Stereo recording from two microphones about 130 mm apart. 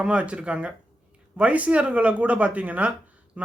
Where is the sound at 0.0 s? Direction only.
10° right (ahead or behind).